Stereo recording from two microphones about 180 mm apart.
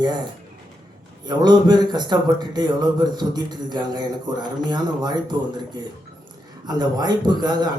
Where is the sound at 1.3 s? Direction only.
25° right (ahead or behind).